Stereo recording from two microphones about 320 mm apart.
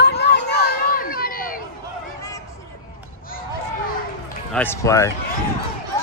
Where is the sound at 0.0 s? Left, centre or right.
Left.